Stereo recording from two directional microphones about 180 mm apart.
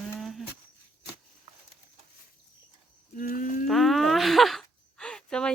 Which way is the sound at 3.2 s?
50° left (ahead or behind).